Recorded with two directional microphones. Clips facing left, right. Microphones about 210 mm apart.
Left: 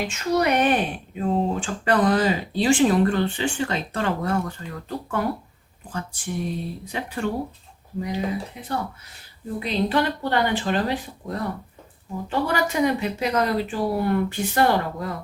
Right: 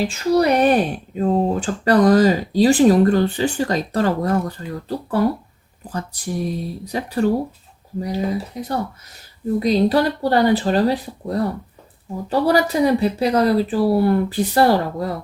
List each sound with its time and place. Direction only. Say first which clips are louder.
0.0 s speech: right 5 dB; 35° right (ahead or behind)